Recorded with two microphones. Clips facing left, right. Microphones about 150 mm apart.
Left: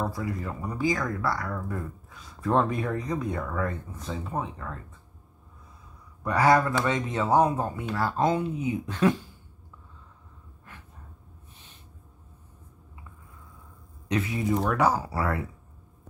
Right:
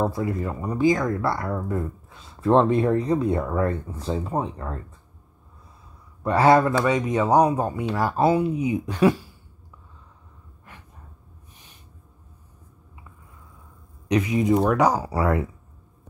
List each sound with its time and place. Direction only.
0.0 s speech: 25° right (ahead or behind)
6.2 s speech: 25° right (ahead or behind)
6.8 s speech: 15° right (ahead or behind)
14.0 s speech: 15° right (ahead or behind)